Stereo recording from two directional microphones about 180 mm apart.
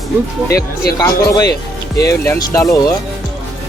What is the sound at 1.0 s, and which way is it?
Speech, 20° left (ahead or behind).